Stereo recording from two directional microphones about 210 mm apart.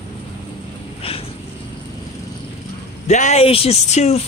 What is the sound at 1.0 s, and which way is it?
Cat, 25° left (ahead or behind).